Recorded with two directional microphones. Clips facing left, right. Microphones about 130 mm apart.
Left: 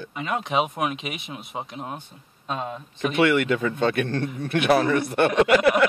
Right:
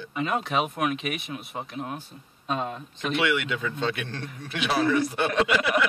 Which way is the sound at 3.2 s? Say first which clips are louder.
Left 7 dB; 50° left (ahead or behind).